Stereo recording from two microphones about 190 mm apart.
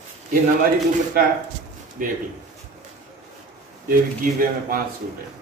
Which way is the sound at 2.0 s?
45° right (ahead or behind).